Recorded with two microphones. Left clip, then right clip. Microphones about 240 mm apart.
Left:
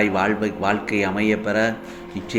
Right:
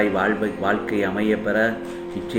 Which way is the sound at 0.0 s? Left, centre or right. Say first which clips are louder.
Even; left.